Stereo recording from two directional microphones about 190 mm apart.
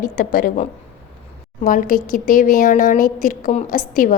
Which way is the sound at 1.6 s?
45° left (ahead or behind).